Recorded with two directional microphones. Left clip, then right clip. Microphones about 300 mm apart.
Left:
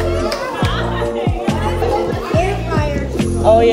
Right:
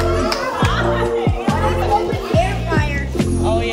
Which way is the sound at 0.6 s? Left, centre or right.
Centre.